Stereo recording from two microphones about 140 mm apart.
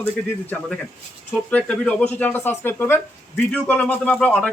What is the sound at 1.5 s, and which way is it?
Speech, 10° left (ahead or behind).